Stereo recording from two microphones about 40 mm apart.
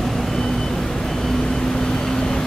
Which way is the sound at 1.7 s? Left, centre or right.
Centre.